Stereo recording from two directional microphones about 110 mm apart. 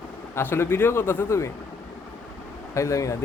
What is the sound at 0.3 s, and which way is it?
Speech, 20° left (ahead or behind).